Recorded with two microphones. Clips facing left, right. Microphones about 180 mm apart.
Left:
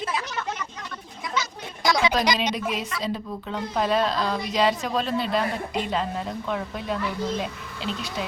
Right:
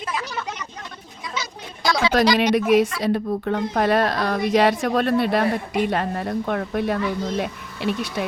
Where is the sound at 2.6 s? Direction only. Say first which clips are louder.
Right 11 dB; 65° right (ahead or behind).